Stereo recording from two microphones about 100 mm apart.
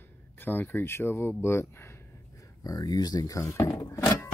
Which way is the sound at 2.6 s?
40° left (ahead or behind).